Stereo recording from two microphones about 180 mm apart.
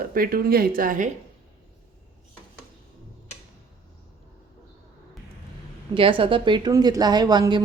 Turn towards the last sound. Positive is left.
turn(degrees=-20)  # may be behind; listen again after turning